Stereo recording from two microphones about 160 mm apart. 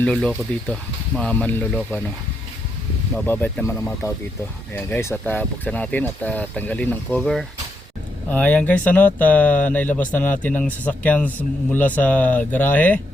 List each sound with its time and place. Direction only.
0.0 s speech: 5° left (ahead or behind)
3.2 s speech: 10° left (ahead or behind)